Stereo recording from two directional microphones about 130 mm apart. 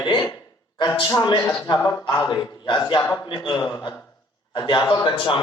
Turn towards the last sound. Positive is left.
turn(degrees=35)  # may be behind; listen again after turning